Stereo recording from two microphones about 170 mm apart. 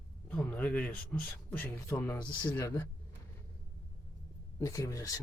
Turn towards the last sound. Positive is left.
turn(degrees=20)  # may be behind; listen again after turning